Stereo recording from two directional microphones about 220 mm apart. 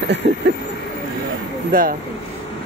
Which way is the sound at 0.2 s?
55° right (ahead or behind).